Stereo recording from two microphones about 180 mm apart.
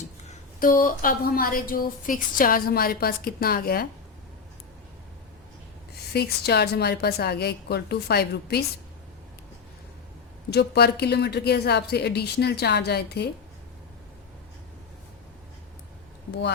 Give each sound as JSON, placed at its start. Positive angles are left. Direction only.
{"t": 0.3, "sound": "a woman's voice", "side_deg": 50}
{"t": 6.1, "sound": "a woman's voice", "side_deg": 60}
{"t": 10.5, "sound": "a woman's voice", "side_deg": 65}